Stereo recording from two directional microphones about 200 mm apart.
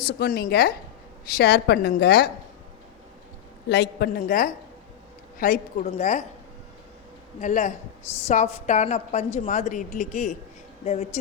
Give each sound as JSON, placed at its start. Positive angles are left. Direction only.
{"t": 0.2, "sound": "a woman's voice", "side_deg": 50}
{"t": 3.7, "sound": "a woman's voice", "side_deg": 55}
{"t": 7.4, "sound": "a woman's voice", "side_deg": 40}